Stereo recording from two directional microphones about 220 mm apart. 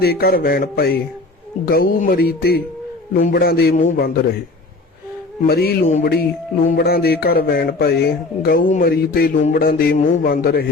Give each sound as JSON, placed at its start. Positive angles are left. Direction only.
{"t": 0.0, "sound": "speech", "side_deg": 45}
{"t": 5.5, "sound": "speech", "side_deg": 45}